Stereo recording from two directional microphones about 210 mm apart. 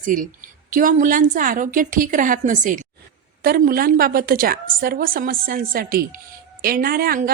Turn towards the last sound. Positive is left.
turn(degrees=-45)  # may be behind; listen again after turning